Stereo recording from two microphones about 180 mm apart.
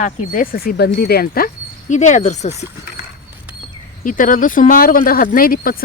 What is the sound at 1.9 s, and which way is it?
Speech, 40° left (ahead or behind).